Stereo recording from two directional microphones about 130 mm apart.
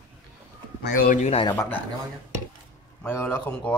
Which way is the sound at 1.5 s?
15° left (ahead or behind).